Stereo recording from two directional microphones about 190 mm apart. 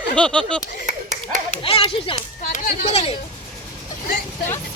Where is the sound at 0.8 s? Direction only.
40° right (ahead or behind).